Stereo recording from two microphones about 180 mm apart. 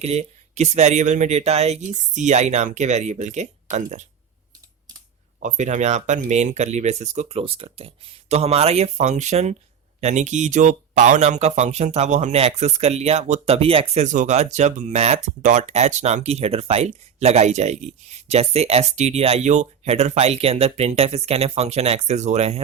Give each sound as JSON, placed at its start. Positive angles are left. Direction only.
{"t": 0.0, "sound": "speech", "side_deg": -35}
{"t": 5.4, "sound": "speech", "side_deg": -40}